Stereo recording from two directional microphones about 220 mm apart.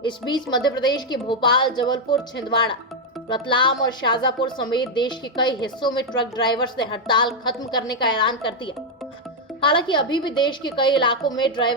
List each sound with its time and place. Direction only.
0.0 s speech: 20° left (ahead or behind)